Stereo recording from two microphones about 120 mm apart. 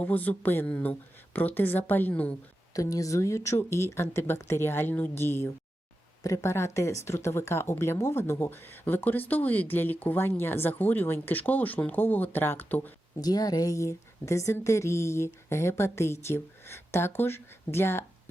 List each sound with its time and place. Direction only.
0.0 s speech: 15° left (ahead or behind)
2.7 s a woman's voice: 30° left (ahead or behind)
13.1 s a woman's voice: 30° left (ahead or behind)